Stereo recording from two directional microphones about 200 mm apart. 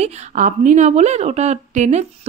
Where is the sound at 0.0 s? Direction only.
40° right (ahead or behind).